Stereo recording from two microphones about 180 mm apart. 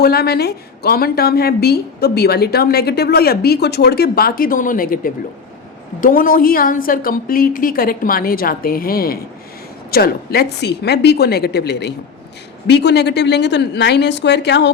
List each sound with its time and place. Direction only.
0.0 s a woman's voice: 60° left (ahead or behind)